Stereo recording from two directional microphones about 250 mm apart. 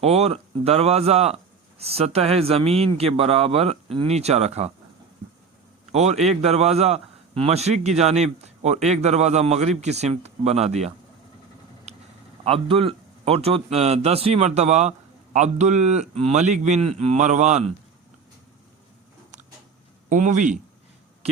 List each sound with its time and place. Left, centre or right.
0.0 s a man's voice: right
5.9 s a man's voice: right
11.9 s a sound: right
12.5 s a man's voice: right
20.1 s a man's voice: right